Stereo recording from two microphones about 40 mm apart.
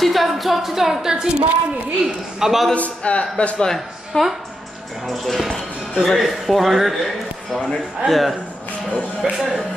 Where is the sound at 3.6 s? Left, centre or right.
Centre.